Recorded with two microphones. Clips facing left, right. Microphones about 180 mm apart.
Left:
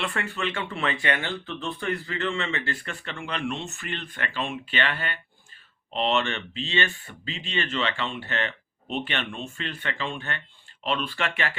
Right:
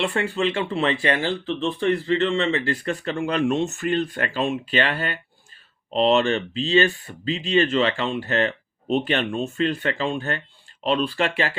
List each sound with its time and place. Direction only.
0.0 s speech: 30° right (ahead or behind)